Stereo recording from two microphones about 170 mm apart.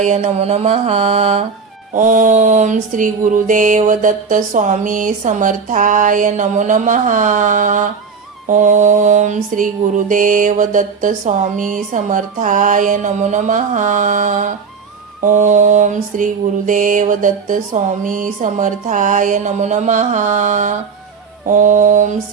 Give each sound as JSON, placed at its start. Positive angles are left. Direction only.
{"t": 0.0, "sound": "mantra", "side_deg": -40}